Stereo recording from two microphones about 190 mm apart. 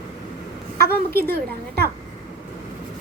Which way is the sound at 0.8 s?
55° right (ahead or behind).